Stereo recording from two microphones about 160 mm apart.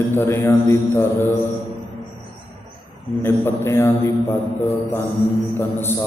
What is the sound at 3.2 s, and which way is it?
Mantra, 15° left (ahead or behind).